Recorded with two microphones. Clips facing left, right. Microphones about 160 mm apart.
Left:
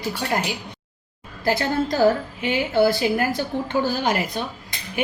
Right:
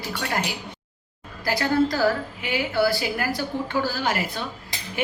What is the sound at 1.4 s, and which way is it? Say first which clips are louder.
A woman's voice: even; 20° left (ahead or behind).